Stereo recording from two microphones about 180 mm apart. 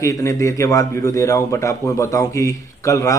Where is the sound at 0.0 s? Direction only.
20° left (ahead or behind).